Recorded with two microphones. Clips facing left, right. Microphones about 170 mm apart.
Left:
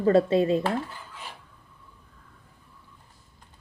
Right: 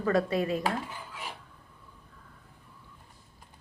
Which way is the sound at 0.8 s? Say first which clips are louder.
Even; 15° right (ahead or behind).